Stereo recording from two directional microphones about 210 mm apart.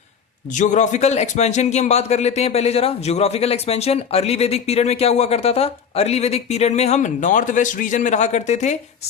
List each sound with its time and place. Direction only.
0.5 s speech: 35° left (ahead or behind)